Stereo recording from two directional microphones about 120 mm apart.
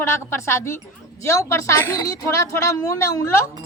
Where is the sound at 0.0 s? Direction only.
25° left (ahead or behind).